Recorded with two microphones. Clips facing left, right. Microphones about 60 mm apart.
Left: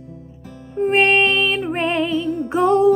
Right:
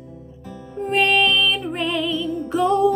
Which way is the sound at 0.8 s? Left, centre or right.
Left.